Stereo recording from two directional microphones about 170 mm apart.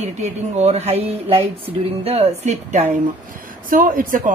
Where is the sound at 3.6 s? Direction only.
55° right (ahead or behind).